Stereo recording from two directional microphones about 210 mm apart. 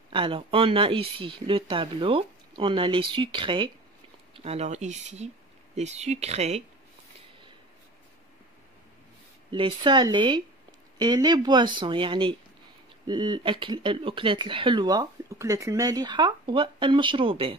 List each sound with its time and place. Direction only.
0.1 s speech: 25° right (ahead or behind)
9.5 s speech: 25° right (ahead or behind)